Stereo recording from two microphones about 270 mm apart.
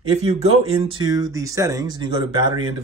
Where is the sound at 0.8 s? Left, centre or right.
Centre.